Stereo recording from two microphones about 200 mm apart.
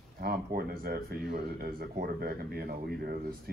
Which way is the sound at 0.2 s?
50° right (ahead or behind).